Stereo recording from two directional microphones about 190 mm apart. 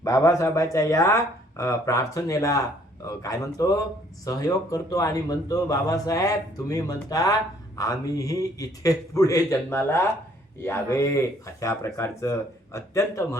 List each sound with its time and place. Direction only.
0.0 s a man's voice: 15° left (ahead or behind)